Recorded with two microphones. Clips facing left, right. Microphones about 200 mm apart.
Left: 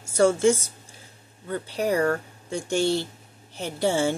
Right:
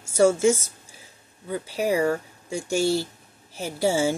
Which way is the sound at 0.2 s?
10° right (ahead or behind).